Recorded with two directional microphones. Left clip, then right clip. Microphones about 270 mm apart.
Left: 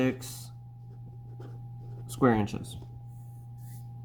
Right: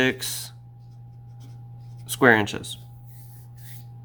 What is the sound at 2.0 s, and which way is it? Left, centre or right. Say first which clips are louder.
Speech: right 9 dB; centre.